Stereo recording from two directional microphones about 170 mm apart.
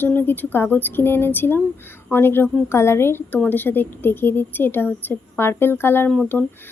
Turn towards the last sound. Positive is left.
turn(degrees=10)  # may be behind; listen again after turning